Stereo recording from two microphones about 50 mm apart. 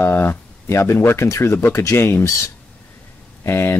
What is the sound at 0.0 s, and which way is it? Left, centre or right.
Speech, left.